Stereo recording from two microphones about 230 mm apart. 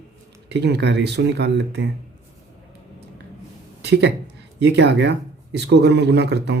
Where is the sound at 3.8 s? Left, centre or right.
Right.